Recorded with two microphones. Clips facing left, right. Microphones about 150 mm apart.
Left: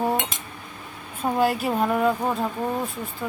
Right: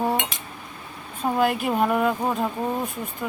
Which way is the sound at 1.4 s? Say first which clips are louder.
Left 1 dB; 35° left (ahead or behind).